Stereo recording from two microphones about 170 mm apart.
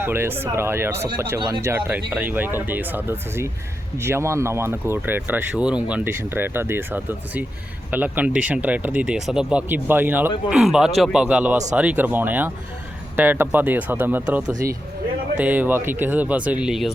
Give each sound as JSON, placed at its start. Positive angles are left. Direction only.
{"t": 0.0, "sound": "speech", "side_deg": -15}
{"t": 1.4, "sound": "speech", "side_deg": -25}
{"t": 1.6, "sound": "speech", "side_deg": -10}